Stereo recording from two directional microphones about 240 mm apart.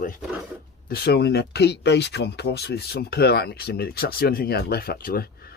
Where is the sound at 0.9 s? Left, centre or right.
Left.